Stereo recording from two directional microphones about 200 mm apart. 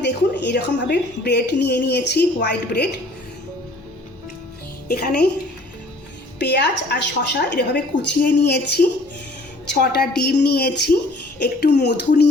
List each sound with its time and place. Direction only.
0.0 s a woman's voice: 60° left (ahead or behind)
4.9 s a woman's voice: 50° left (ahead or behind)
6.4 s a woman's voice: 60° left (ahead or behind)